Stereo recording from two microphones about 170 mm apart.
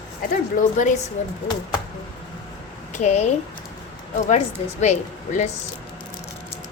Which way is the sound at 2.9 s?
45° left (ahead or behind).